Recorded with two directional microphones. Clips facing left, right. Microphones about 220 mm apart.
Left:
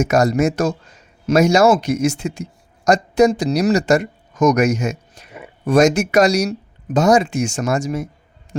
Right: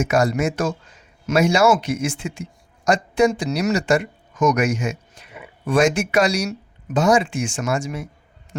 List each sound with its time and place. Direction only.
0.0 s speech: 40° left (ahead or behind)